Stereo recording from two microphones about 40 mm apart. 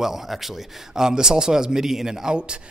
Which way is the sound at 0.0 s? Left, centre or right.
Centre.